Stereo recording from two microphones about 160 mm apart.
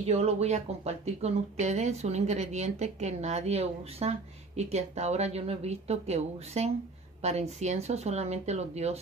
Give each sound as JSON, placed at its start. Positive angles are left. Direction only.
{"t": 0.0, "sound": "speech", "side_deg": -40}